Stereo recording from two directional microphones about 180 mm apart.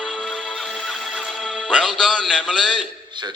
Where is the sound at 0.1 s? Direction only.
Centre (ahead or behind).